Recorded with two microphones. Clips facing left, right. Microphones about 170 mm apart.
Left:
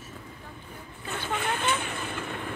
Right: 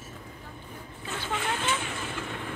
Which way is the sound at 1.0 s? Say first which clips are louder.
Left 1 dB; 55° left (ahead or behind).